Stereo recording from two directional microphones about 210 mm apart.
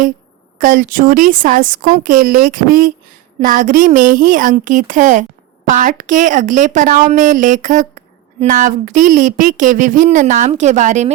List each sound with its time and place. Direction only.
0.6 s a woman's voice: 40° right (ahead or behind)